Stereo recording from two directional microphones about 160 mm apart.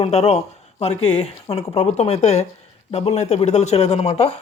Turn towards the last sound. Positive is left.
turn(degrees=40)  # may be behind; listen again after turning